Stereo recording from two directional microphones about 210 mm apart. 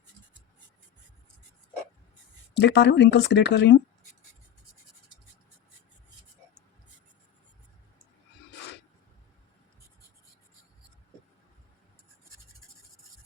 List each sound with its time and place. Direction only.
2.6 s speech: 55° left (ahead or behind)